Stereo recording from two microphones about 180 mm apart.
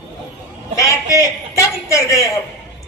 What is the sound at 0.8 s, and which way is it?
A man's voice, 20° left (ahead or behind).